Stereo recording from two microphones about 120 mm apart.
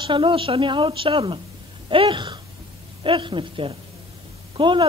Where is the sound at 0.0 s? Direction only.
45° right (ahead or behind).